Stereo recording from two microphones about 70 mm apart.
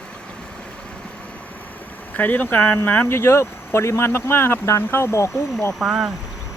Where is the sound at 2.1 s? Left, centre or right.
Left.